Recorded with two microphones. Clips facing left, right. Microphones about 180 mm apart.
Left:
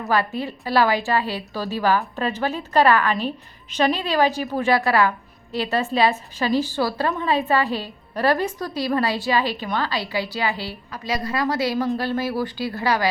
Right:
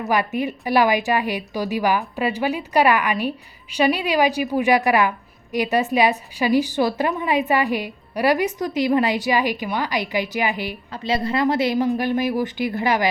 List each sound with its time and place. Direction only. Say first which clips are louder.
0.1 s a woman's voice: right 1 dB; 15° right (ahead or behind)